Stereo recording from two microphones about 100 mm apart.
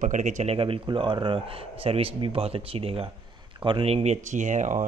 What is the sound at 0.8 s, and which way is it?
Speech, 50° right (ahead or behind).